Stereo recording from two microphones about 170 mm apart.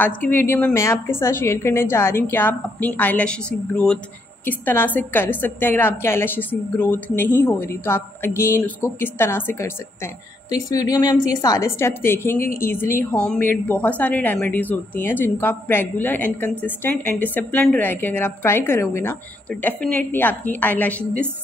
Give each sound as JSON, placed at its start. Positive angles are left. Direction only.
{"t": 0.0, "sound": "a woman's voice", "side_deg": 10}